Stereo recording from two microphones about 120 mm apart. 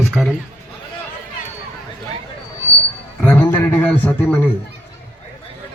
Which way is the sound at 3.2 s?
15° left (ahead or behind).